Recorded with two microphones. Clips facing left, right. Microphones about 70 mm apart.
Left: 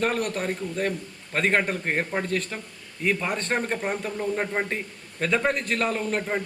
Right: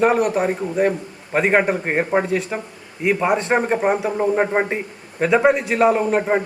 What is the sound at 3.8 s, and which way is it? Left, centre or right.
Speech, right.